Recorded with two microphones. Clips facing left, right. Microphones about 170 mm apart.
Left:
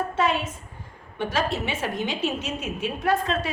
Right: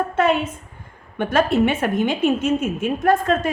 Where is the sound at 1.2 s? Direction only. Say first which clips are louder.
Right 9 dB; 55° right (ahead or behind).